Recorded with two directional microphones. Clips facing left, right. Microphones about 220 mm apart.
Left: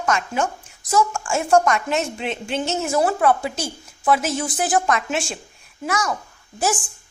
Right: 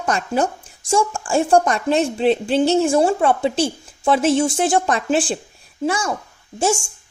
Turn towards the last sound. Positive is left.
turn(degrees=-25)  # may be behind; listen again after turning